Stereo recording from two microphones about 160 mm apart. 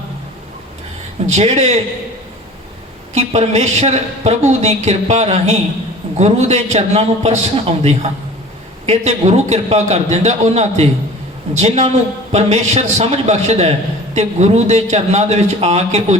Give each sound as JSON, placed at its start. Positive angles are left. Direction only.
{"t": 1.3, "sound": "a man's voice", "side_deg": -45}
{"t": 3.2, "sound": "a man's voice", "side_deg": -45}